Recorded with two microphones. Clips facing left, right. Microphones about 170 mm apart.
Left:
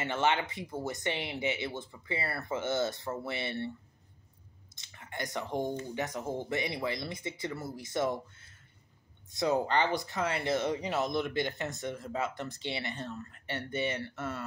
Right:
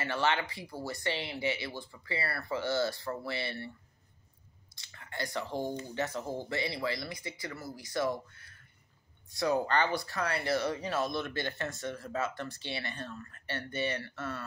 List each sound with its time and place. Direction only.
0.0 s speech: 20° left (ahead or behind)
4.7 s speech: 20° left (ahead or behind)